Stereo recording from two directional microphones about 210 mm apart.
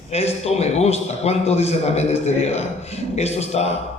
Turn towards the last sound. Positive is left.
turn(degrees=30)  # may be behind; listen again after turning